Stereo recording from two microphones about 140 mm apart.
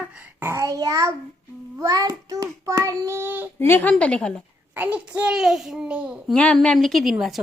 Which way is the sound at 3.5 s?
15° left (ahead or behind).